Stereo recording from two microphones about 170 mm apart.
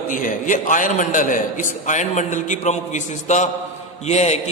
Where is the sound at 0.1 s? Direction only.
50° left (ahead or behind).